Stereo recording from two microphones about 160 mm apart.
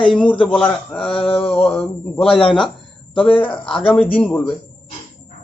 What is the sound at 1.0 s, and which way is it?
Mantra, 35° left (ahead or behind).